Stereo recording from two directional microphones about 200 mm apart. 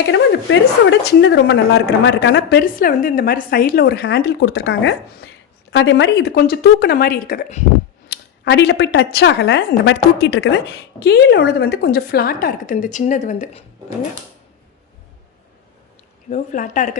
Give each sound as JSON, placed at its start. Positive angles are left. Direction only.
{"t": 0.1, "sound": "a woman's voice", "side_deg": 65}
{"t": 8.1, "sound": "a woman's voice", "side_deg": 60}
{"t": 16.3, "sound": "a woman's voice", "side_deg": 40}